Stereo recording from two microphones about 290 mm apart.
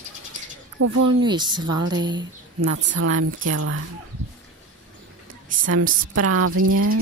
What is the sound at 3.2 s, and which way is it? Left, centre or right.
Speech, right.